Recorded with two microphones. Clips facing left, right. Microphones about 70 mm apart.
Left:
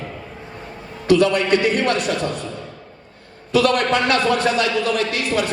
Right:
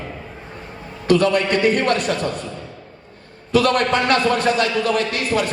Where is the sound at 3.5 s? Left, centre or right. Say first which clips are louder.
Even; right.